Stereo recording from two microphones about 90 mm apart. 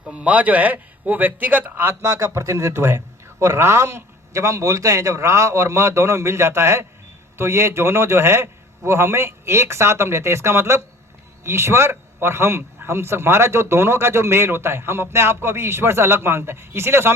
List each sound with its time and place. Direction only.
0.1 s a man's voice: 15° right (ahead or behind)